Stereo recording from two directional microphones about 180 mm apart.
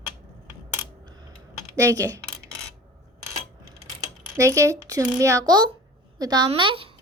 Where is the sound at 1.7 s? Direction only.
20° right (ahead or behind).